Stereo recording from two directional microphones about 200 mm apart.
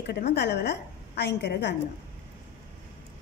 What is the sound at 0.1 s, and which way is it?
A woman's voice, 60° left (ahead or behind).